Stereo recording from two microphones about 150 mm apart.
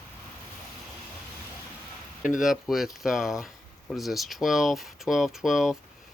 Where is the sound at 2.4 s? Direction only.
Centre (ahead or behind).